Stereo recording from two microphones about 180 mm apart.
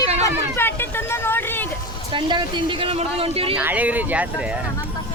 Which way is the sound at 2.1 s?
25° right (ahead or behind).